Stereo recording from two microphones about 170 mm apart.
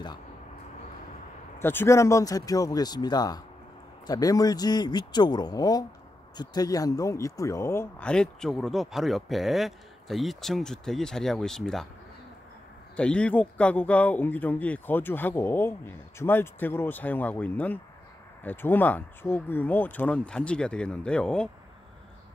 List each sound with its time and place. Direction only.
1.6 s speech: 15° left (ahead or behind)
12.9 s a man's voice: 5° left (ahead or behind)